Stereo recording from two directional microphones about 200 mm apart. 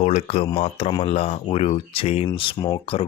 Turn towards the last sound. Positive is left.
turn(degrees=25)  # may be behind; listen again after turning